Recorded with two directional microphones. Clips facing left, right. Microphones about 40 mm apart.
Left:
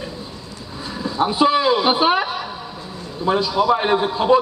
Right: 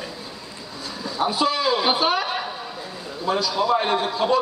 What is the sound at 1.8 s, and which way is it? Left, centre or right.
Speech, left.